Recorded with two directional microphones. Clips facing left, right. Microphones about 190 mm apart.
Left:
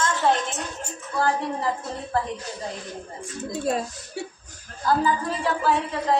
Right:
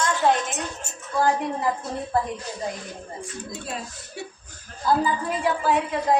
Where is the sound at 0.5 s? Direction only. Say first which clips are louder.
Even; 15° right (ahead or behind).